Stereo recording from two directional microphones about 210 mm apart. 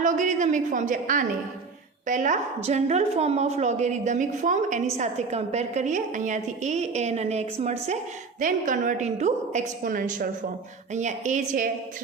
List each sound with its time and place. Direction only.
0.0 s a woman's voice: 35° right (ahead or behind)